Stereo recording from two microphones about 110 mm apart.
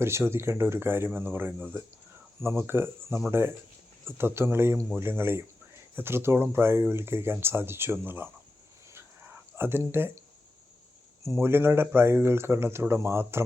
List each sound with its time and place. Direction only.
0.0 s speech: 25° right (ahead or behind)
8.9 s a sound: 20° right (ahead or behind)
11.2 s speech: 25° right (ahead or behind)